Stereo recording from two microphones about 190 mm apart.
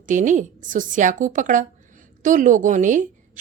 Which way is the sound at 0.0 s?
40° right (ahead or behind).